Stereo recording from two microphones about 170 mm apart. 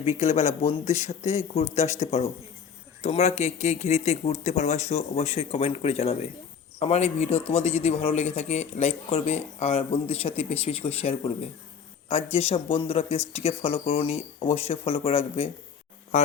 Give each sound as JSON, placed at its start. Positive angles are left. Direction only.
{"t": 0.0, "sound": "a man's voice", "side_deg": 40}
{"t": 16.1, "sound": "speech", "side_deg": 45}